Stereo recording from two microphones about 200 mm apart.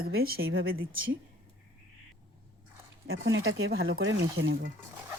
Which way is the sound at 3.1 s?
75° right (ahead or behind).